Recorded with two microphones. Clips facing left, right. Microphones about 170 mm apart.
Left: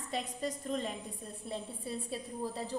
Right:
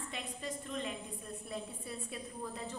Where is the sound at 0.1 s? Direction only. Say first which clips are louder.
Left 8 dB; 40° left (ahead or behind).